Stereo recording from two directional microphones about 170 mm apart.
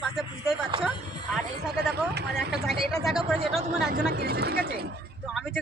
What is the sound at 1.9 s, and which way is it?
Speech, 75° right (ahead or behind).